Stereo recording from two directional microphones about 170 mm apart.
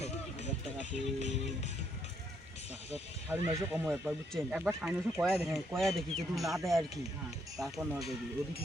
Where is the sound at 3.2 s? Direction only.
15° right (ahead or behind).